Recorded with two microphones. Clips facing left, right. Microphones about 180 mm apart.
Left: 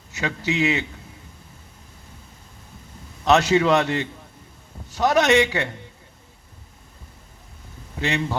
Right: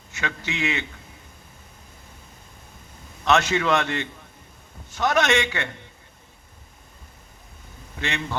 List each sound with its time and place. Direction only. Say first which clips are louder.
0.2 s a man's voice: left 5 dB; 35° left (ahead or behind)
3.2 s a man's voice: left 4 dB; 35° left (ahead or behind)
7.9 s a man's voice: left 5 dB; 35° left (ahead or behind)